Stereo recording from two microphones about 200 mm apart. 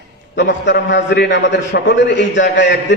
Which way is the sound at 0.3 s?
60° left (ahead or behind).